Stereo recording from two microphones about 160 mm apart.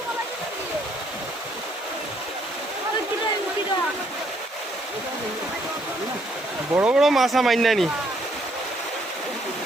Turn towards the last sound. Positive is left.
turn(degrees=0)  # may be behind; listen again after turning